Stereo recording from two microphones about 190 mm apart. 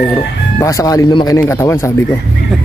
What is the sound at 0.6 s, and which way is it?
Speech, 15° left (ahead or behind).